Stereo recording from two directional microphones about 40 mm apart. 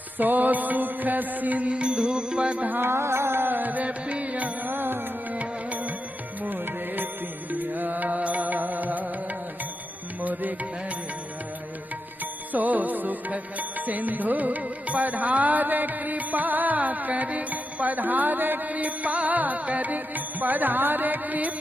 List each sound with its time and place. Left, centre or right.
0.2 s music: right
2.8 s music: right
4.7 s music: right
5.4 s music: right
10.2 s music: right
12.5 s music: right
18.7 s music: right